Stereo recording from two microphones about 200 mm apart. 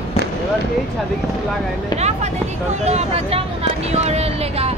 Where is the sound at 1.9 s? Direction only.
35° right (ahead or behind).